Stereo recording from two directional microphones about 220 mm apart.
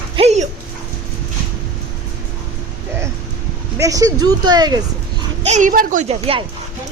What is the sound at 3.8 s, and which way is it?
Speech, 15° right (ahead or behind).